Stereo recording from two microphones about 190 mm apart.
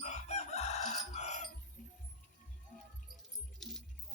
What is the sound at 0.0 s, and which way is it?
Chicken, 35° left (ahead or behind).